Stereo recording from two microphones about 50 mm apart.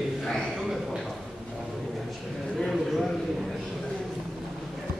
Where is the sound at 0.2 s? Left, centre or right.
Centre.